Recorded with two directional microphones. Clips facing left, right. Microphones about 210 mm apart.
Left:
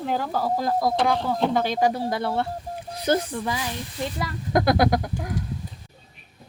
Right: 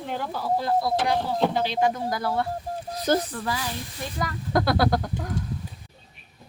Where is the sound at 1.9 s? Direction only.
25° left (ahead or behind).